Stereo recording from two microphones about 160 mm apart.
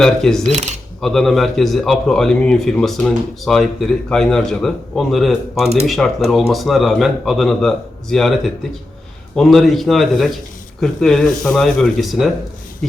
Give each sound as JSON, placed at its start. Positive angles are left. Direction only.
{"t": 0.0, "sound": "speech", "side_deg": 5}
{"t": 9.3, "sound": "speech", "side_deg": 0}